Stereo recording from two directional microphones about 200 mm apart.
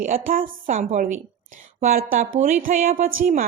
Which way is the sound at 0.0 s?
45° right (ahead or behind).